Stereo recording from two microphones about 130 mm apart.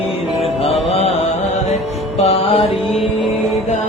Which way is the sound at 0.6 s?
50° left (ahead or behind).